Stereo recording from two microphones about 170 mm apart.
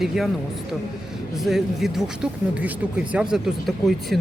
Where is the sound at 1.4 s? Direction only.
Centre (ahead or behind).